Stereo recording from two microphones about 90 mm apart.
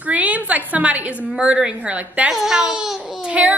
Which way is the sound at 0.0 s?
15° right (ahead or behind).